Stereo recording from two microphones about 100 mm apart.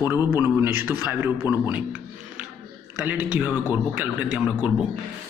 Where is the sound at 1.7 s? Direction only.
15° right (ahead or behind).